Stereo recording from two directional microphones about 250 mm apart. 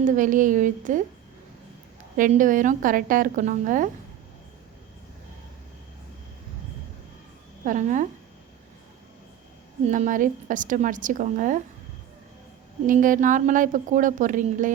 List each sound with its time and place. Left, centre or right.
0.0 s a woman's voice: right
2.1 s a woman's voice: right
7.6 s a woman's voice: right
9.8 s a woman's voice: right
12.9 s a woman's voice: right